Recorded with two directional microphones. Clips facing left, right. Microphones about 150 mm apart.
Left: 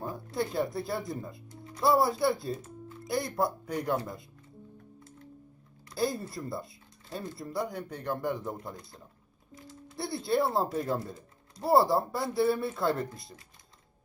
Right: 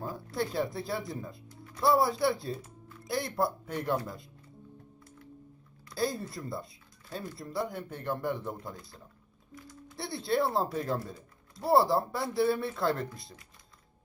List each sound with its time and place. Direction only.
0.0 s speech: centre (ahead or behind)
5.9 s speech: centre (ahead or behind)
8.7 s speech: 25° left (ahead or behind)
9.6 s music: 25° left (ahead or behind)
10.0 s speech: centre (ahead or behind)